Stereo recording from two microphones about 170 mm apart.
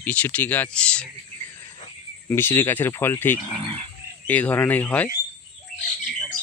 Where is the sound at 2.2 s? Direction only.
15° left (ahead or behind).